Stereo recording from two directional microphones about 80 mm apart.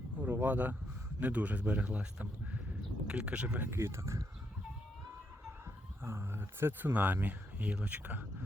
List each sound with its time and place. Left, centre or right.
0.2 s a man's voice: right
3.7 s speech: right
6.0 s speech: right